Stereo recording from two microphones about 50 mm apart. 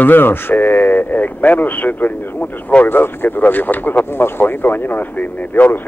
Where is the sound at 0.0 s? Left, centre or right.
Left.